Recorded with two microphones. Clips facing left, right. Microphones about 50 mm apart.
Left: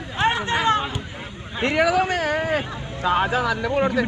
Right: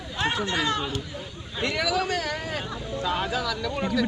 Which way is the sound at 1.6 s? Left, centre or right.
Left.